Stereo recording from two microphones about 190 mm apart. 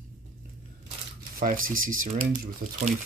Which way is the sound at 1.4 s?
45° right (ahead or behind).